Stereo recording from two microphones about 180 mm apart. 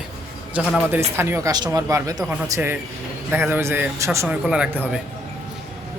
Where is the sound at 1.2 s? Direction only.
15° right (ahead or behind).